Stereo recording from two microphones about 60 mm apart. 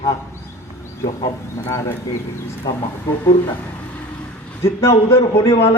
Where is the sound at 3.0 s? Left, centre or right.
Left.